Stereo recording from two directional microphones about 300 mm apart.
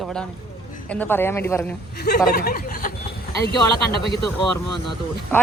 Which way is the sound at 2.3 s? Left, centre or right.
Left.